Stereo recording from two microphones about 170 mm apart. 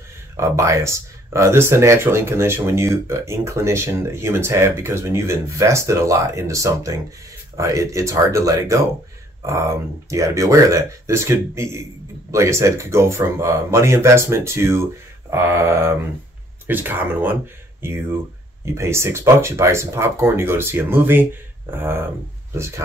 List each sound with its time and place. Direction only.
0.4 s speech: 15° right (ahead or behind)